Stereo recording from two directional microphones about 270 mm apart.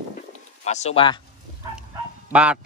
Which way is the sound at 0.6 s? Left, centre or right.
Left.